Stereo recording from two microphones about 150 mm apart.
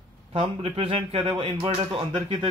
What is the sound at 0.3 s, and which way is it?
A man's voice, 40° right (ahead or behind).